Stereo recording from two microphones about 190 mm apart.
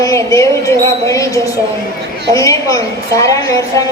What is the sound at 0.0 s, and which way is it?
A woman's voice, 15° left (ahead or behind).